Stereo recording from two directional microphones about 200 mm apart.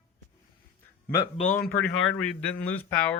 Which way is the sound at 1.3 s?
35° left (ahead or behind).